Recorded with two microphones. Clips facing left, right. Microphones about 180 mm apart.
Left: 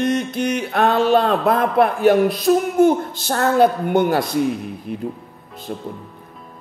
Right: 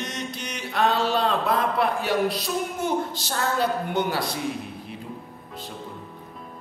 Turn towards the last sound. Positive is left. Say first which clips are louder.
# left 6 dB
turn(degrees=50)  # may be behind; listen again after turning